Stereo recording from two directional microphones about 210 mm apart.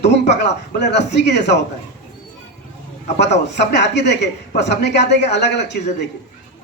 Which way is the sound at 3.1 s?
55° left (ahead or behind).